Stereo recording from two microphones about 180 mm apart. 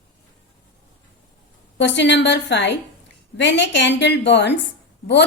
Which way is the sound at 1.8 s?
75° left (ahead or behind).